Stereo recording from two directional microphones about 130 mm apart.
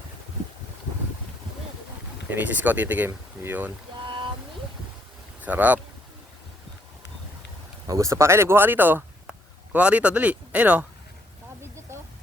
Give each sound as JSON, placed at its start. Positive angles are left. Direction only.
{"t": 2.3, "sound": "speech", "side_deg": -10}
{"t": 5.4, "sound": "speech", "side_deg": -10}
{"t": 7.9, "sound": "speech", "side_deg": -25}